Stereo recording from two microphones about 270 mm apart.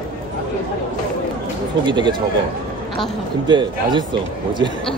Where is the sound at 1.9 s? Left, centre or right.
Centre.